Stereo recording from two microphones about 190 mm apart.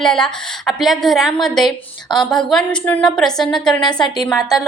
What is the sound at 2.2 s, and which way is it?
A woman's voice, 5° left (ahead or behind).